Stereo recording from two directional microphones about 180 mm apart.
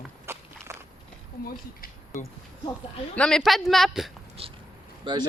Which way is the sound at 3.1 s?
5° left (ahead or behind).